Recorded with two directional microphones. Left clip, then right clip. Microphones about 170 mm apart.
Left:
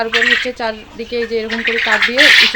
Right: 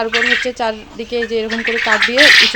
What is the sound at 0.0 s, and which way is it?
Speech, 25° right (ahead or behind).